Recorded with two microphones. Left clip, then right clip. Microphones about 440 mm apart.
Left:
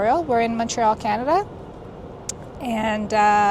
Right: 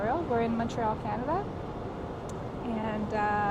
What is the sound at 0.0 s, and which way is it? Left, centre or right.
Speech, left.